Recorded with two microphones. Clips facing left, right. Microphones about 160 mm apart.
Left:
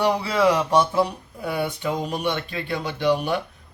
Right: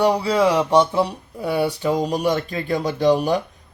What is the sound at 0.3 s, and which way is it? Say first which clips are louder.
Speech: right 1 dB; 30° right (ahead or behind).